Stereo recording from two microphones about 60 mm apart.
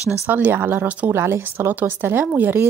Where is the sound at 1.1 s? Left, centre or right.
Right.